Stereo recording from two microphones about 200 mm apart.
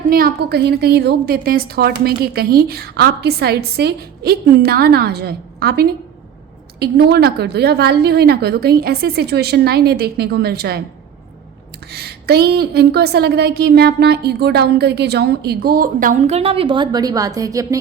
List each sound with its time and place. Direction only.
0.1 s a woman's voice: 45° right (ahead or behind)
11.9 s a woman's voice: 55° right (ahead or behind); by 17.7 s 15° right (ahead or behind)